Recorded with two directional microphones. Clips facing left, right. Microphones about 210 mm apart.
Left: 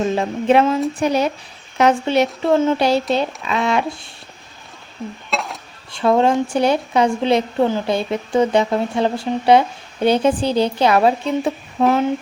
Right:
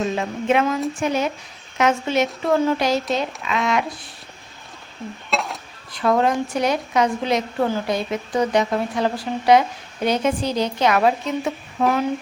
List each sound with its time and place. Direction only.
0.0 s speech: 35° left (ahead or behind)
5.3 s dishes: centre (ahead or behind)
5.9 s speech: 25° left (ahead or behind)